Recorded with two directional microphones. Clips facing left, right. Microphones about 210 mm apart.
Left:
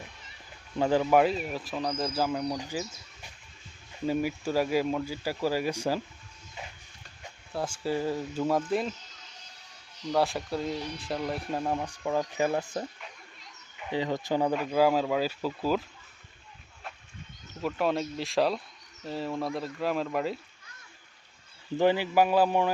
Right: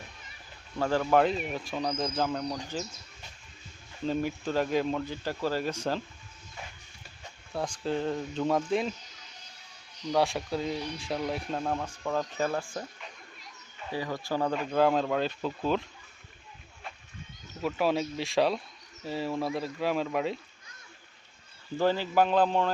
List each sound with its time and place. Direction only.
0.8 s speech: 15° left (ahead or behind)
4.0 s speech: 10° left (ahead or behind)
7.5 s speech: 5° left (ahead or behind)
10.1 s speech: centre (ahead or behind); by 14.5 s 20° left (ahead or behind)
14.5 s speech: 5° left (ahead or behind)
17.6 s speech: centre (ahead or behind)
21.8 s speech: 15° left (ahead or behind)